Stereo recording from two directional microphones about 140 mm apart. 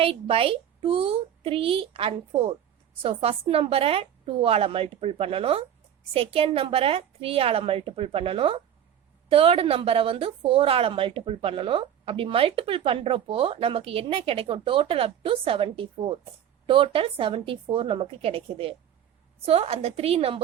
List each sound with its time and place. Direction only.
0.0 s a woman's voice: 40° right (ahead or behind)